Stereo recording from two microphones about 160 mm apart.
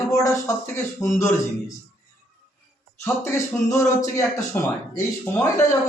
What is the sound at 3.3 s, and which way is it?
Speech, 15° left (ahead or behind).